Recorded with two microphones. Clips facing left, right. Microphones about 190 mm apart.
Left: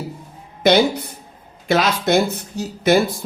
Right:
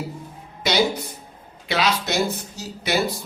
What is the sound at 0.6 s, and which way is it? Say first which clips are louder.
Speech: left 6 dB; 55° left (ahead or behind).